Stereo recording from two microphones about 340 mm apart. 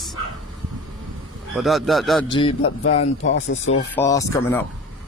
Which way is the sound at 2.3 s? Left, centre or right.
Centre.